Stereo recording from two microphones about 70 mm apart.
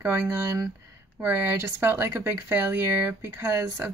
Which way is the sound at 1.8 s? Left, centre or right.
Right.